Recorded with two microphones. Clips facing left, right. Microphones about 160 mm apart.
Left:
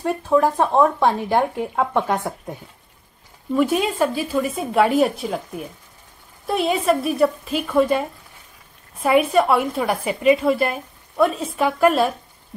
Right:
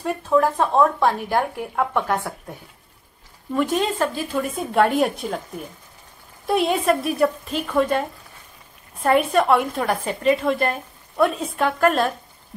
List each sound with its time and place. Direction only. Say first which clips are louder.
0.0 s speech: left 1 dB; 15° left (ahead or behind)
3.5 s a woman's voice: left 2 dB; 10° left (ahead or behind)
6.4 s a woman's voice: even; centre (ahead or behind)